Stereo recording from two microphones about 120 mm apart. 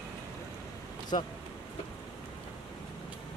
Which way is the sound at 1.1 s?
50° left (ahead or behind).